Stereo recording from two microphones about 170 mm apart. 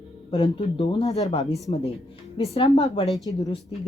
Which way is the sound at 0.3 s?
30° left (ahead or behind).